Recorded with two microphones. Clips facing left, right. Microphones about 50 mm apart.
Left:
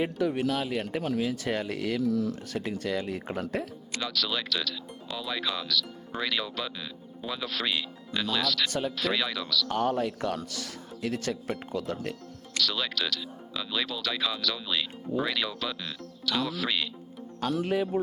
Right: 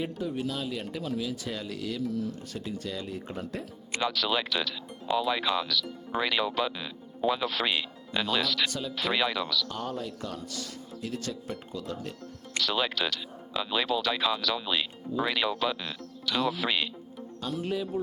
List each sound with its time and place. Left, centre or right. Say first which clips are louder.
0.2 s speech: left 5 dB; left
2.0 s speech: left 5 dB; left
2.5 s speech: left 5 dB; left
3.9 s speech: right 3 dB; centre
9.6 s speech: left 7 dB; left
12.5 s speech: right 1 dB; right
17.4 s speech: left 5 dB; left
17.9 s speech: left 3 dB; left